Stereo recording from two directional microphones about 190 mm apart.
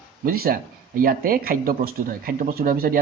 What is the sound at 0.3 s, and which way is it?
Speech, 50° right (ahead or behind).